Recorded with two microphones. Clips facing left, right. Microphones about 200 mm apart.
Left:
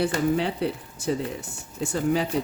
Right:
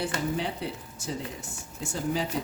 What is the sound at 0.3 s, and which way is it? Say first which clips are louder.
Speech: left 6 dB; 65° left (ahead or behind).